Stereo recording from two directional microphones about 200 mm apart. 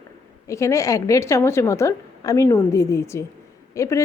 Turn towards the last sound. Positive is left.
turn(degrees=15)  # may be behind; listen again after turning